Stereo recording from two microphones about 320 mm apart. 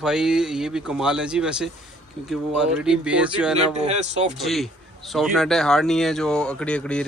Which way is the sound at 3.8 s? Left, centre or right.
Right.